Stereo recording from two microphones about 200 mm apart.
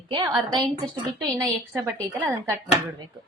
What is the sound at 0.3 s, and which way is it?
Speech, centre (ahead or behind).